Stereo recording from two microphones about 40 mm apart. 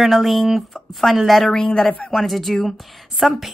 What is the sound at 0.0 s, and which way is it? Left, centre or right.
A woman's voice, centre.